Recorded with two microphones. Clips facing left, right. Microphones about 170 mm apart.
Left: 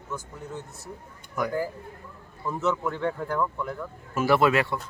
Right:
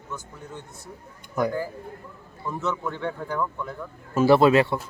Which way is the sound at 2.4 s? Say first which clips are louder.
Left 2 dB; 5° left (ahead or behind).